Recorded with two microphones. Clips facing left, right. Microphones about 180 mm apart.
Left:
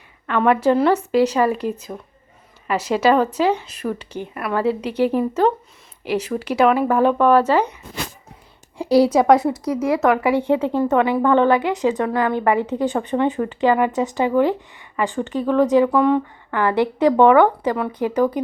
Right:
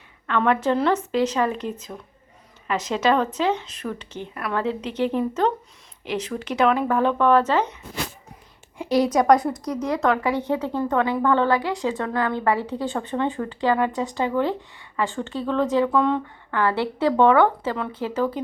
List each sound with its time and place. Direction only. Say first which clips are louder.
0.3 s a woman's voice: left 4 dB; 10° left (ahead or behind)
8.8 s a woman's voice: left 5 dB; 35° left (ahead or behind)
9.3 s a woman's voice: left 3 dB; 5° left (ahead or behind)